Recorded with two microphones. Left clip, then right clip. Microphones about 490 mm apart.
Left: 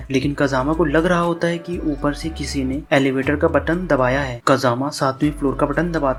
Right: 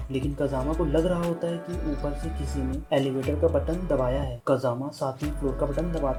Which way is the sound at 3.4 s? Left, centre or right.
Right.